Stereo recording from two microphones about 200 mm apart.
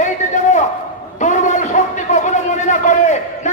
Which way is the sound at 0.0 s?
35° left (ahead or behind).